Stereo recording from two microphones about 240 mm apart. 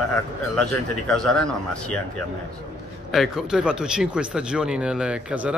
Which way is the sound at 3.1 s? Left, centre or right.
Centre.